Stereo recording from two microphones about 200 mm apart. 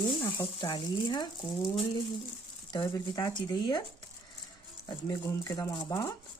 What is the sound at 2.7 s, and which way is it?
Speech, 20° left (ahead or behind).